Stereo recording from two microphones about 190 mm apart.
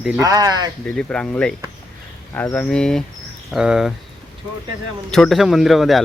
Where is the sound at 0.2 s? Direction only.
20° right (ahead or behind).